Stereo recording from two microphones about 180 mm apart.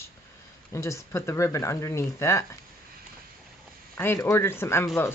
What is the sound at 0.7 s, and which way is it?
Speech, 15° left (ahead or behind).